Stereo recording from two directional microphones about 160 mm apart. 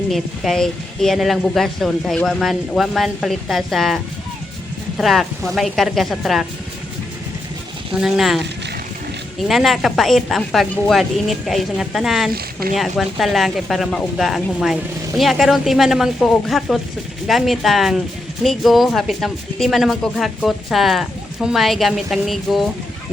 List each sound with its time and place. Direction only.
0.1 s speech: centre (ahead or behind)
8.0 s speech: centre (ahead or behind)
9.5 s speech: centre (ahead or behind)
12.3 s speech: 70° right (ahead or behind)
12.7 s speech: centre (ahead or behind)